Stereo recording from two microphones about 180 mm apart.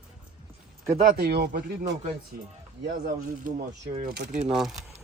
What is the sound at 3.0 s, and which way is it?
Speech, 45° right (ahead or behind).